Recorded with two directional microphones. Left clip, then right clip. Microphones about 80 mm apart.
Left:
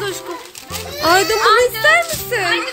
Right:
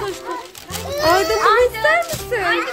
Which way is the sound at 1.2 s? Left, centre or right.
Centre.